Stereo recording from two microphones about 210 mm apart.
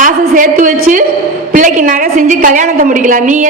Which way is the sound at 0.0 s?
40° right (ahead or behind).